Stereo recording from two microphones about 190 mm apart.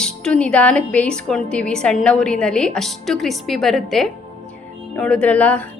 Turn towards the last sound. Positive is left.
turn(degrees=5)  # may be behind; listen again after turning